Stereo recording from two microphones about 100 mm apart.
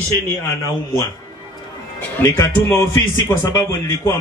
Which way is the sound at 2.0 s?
20° left (ahead or behind).